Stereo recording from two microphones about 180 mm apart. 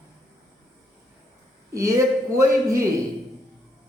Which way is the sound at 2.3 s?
15° right (ahead or behind).